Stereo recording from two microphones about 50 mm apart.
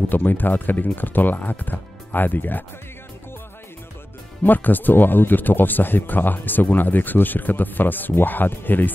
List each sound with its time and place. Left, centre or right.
0.1 s speech: left
4.4 s speech: left